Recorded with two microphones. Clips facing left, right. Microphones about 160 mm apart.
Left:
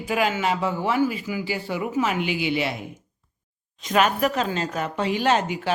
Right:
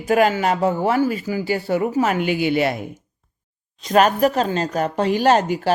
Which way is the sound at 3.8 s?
40° right (ahead or behind).